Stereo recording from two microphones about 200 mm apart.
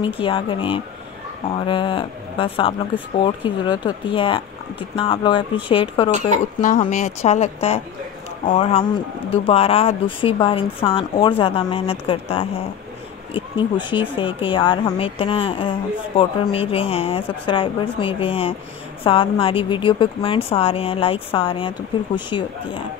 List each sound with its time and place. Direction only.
0.0 s a woman's voice: 25° left (ahead or behind)
6.6 s a woman's voice: 40° left (ahead or behind)